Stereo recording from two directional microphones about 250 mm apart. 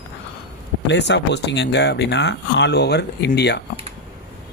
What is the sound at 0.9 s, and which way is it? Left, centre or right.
Speech, left.